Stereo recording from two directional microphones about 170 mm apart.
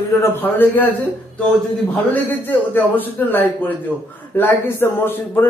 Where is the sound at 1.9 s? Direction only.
10° left (ahead or behind).